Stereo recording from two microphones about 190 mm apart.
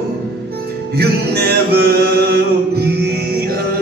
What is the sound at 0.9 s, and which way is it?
Music, 55° right (ahead or behind).